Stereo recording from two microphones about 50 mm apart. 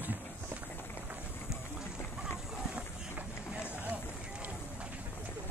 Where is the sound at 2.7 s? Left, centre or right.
Right.